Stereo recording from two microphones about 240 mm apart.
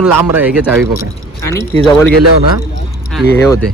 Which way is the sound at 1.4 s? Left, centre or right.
Centre.